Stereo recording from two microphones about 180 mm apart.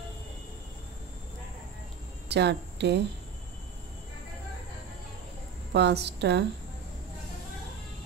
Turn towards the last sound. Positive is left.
turn(degrees=-70)  # may be behind; listen again after turning